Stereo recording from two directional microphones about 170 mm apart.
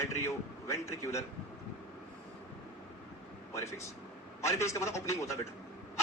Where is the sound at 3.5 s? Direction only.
20° left (ahead or behind).